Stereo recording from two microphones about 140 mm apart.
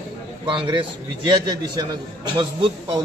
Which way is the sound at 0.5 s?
35° right (ahead or behind).